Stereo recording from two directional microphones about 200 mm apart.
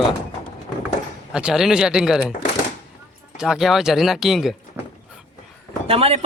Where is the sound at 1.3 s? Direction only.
5° right (ahead or behind).